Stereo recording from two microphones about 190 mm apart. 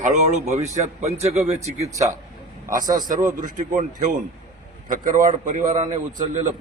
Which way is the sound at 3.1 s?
45° right (ahead or behind).